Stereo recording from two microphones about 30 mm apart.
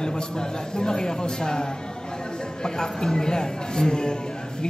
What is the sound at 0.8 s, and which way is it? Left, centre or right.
Speech, left.